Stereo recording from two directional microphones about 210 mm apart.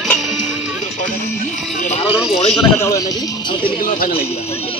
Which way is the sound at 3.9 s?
45° left (ahead or behind).